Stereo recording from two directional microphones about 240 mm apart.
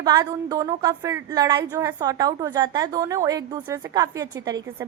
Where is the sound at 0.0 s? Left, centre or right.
Centre.